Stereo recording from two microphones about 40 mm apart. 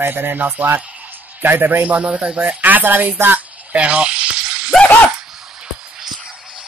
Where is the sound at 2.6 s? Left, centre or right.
Right.